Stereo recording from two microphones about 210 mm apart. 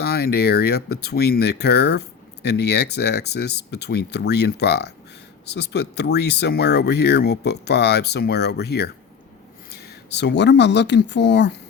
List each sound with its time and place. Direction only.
0.0 s speech: 50° left (ahead or behind)